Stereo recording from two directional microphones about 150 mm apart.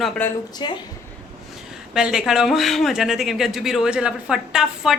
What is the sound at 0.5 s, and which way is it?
Speech, 30° left (ahead or behind).